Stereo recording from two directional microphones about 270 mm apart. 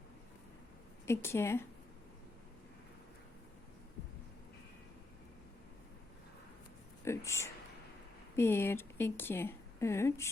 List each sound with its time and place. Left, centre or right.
1.0 s speech: centre
7.3 s speech: centre